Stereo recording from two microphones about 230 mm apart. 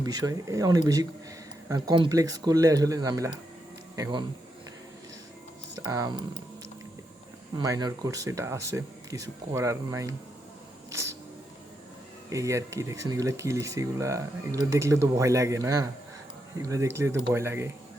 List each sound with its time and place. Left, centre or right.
0.0 s speech: centre
5.7 s speech: centre
7.5 s speech: centre
12.3 s speech: centre